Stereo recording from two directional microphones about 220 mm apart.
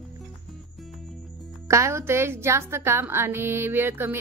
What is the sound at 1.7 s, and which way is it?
A woman's voice, 15° right (ahead or behind).